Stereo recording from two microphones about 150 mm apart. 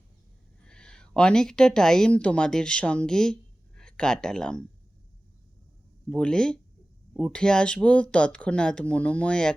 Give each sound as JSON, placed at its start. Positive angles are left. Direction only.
{"t": 0.6, "sound": "a woman's voice", "side_deg": 5}
{"t": 6.1, "sound": "speech", "side_deg": 5}